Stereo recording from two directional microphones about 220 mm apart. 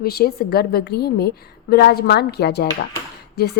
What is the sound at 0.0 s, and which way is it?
A woman's voice, 45° left (ahead or behind).